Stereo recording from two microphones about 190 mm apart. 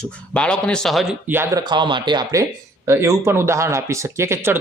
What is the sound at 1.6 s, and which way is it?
Speech, 25° right (ahead or behind).